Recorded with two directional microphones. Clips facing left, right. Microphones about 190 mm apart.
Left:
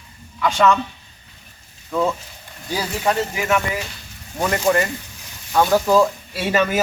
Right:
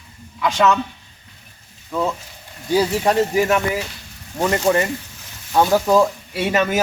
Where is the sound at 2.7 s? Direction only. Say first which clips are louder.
Right 5 dB; 25° right (ahead or behind).